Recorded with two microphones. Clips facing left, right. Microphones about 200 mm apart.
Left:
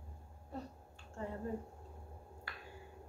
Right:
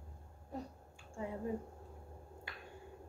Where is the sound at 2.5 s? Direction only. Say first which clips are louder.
Even; 20° right (ahead or behind).